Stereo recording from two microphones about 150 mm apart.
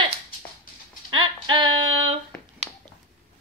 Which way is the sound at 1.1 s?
30° right (ahead or behind).